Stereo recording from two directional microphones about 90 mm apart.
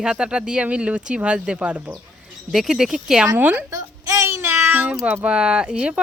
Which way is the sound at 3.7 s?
35° right (ahead or behind).